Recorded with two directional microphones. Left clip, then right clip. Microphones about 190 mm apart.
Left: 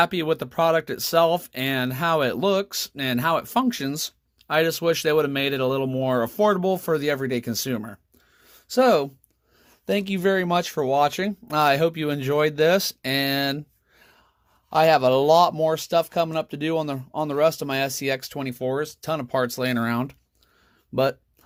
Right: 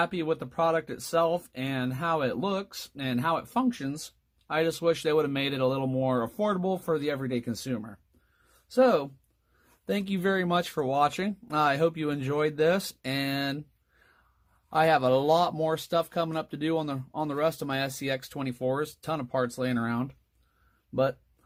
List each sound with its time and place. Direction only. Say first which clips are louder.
0.0 s speech: left 7 dB; 35° left (ahead or behind)
9.8 s speech: left 6 dB; 20° left (ahead or behind)